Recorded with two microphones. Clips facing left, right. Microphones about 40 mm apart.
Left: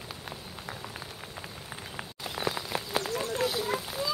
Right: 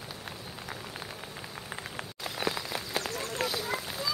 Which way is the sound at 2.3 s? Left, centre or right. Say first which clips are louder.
Even; centre.